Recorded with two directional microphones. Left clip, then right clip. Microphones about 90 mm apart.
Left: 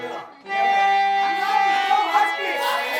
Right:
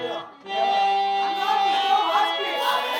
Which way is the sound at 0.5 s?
30° left (ahead or behind).